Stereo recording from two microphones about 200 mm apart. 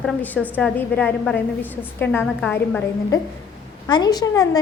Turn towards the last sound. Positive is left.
turn(degrees=20)  # may be behind; listen again after turning